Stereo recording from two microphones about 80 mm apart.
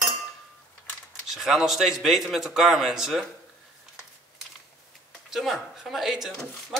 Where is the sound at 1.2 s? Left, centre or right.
Centre.